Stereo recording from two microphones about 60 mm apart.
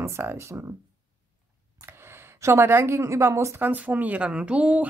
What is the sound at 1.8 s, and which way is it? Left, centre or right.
Speech, right.